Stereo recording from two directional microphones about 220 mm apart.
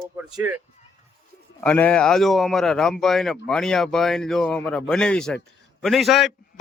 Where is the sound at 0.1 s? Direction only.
10° right (ahead or behind).